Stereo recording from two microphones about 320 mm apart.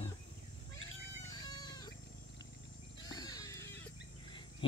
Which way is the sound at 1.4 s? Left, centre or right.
Centre.